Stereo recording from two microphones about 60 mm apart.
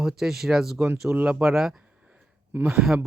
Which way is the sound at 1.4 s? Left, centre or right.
Centre.